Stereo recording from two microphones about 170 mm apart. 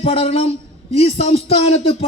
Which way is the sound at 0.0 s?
35° left (ahead or behind).